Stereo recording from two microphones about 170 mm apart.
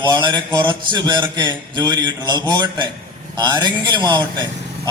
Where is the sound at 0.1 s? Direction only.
25° right (ahead or behind).